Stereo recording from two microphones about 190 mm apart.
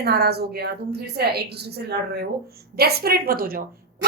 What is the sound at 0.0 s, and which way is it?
A woman's voice, 60° right (ahead or behind).